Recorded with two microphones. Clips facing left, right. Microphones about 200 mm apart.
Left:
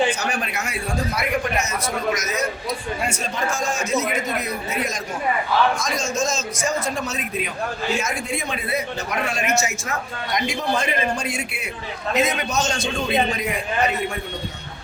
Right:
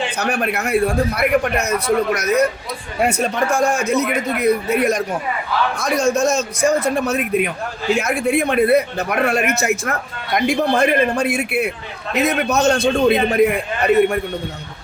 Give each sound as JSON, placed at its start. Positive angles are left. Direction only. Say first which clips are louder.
{"t": 0.2, "sound": "a man's voice", "louder": "right 6 dB", "side_deg": -60}